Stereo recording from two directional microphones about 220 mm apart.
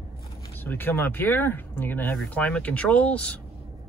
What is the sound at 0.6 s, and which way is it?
Speech, 10° left (ahead or behind).